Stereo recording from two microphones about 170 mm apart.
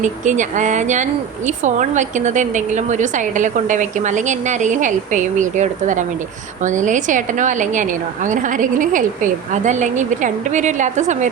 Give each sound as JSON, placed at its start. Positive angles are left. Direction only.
{"t": 0.0, "sound": "a woman's voice", "side_deg": -45}